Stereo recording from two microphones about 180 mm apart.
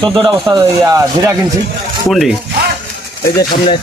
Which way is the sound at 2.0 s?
Centre (ahead or behind).